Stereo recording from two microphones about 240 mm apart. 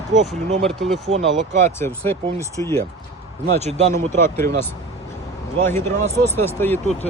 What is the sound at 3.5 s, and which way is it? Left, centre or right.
Speech, right.